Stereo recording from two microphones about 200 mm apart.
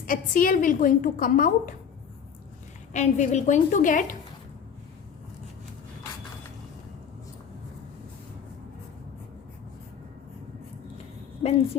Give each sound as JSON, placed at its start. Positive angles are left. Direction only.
{"t": 0.0, "sound": "a woman's voice", "side_deg": 45}
{"t": 2.9, "sound": "a woman's voice", "side_deg": 35}
{"t": 11.4, "sound": "a sound", "side_deg": 35}